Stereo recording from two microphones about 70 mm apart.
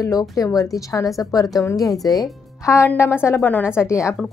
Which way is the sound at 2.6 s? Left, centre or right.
Left.